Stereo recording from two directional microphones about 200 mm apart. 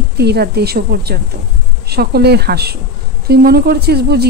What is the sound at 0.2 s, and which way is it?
A woman's voice, 55° right (ahead or behind).